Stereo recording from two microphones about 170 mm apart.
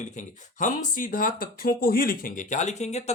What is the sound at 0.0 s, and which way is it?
Speech, 45° left (ahead or behind).